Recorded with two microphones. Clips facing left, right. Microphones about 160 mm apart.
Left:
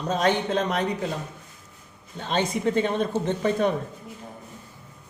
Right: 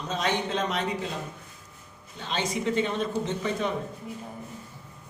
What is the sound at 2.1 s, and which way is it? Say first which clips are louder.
Speech: left 4 dB; 55° left (ahead or behind).